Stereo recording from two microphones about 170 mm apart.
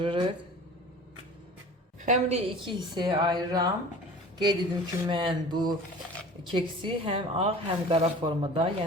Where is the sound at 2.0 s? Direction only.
40° right (ahead or behind); by 3.7 s 25° right (ahead or behind).